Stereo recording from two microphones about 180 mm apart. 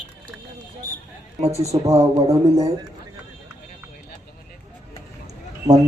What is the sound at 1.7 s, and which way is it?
Speech, 15° right (ahead or behind).